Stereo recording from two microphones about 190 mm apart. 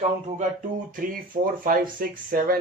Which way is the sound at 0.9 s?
45° right (ahead or behind).